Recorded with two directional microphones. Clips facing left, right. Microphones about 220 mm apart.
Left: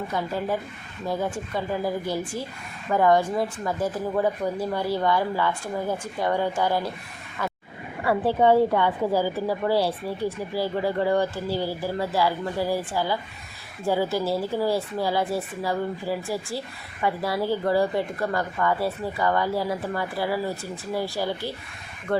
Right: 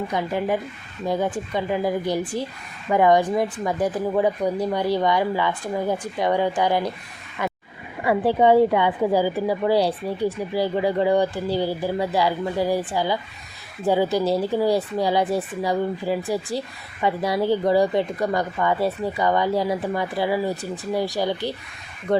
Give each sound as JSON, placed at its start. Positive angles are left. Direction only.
{"t": 0.1, "sound": "a woman's voice", "side_deg": -15}
{"t": 7.4, "sound": "roaring cats", "side_deg": -20}
{"t": 8.0, "sound": "a woman's voice", "side_deg": -15}